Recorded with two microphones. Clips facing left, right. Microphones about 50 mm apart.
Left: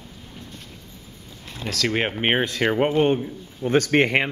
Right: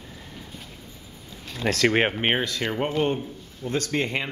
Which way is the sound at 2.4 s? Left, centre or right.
Left.